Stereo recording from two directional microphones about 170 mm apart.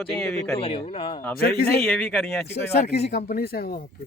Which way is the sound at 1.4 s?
60° left (ahead or behind).